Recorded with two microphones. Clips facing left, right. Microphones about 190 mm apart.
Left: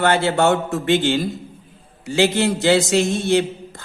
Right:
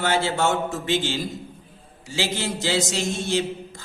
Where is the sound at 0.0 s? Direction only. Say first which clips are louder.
Left 5 dB; 60° left (ahead or behind).